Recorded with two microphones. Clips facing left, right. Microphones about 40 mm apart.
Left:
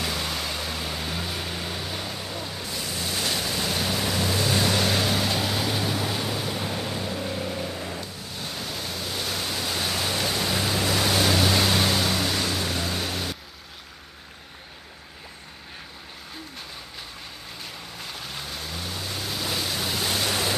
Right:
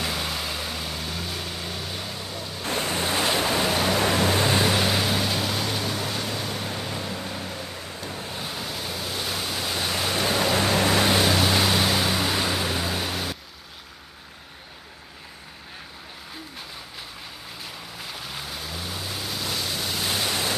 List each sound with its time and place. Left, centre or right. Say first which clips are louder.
0.0 s vehicle: even; centre
2.6 s waves: right 9 dB; right
4.5 s vehicle: right 1 dB; centre
8.4 s waves: left 2 dB; centre
10.6 s boat: right 3 dB; right
11.1 s waves: right 1 dB; centre
17.9 s waves: right 1 dB; centre